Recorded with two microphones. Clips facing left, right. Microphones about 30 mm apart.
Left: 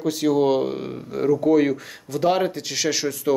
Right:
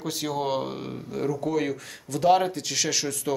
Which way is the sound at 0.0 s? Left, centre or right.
Centre.